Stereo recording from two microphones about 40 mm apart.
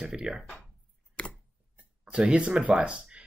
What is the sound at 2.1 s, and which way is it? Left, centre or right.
Speech, right.